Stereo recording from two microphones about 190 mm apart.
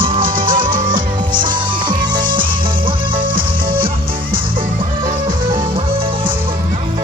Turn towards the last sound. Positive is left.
turn(degrees=-25)  # may be behind; listen again after turning